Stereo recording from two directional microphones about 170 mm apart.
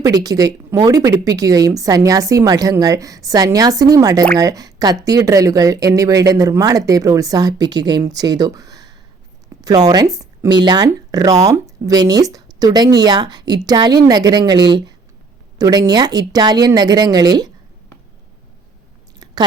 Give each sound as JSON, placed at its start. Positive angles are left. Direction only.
{"t": 0.0, "sound": "speech", "side_deg": -20}
{"t": 19.2, "sound": "chewing", "side_deg": -25}